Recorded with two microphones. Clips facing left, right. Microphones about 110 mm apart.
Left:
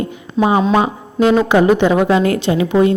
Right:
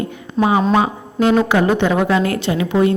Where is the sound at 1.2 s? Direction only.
20° left (ahead or behind).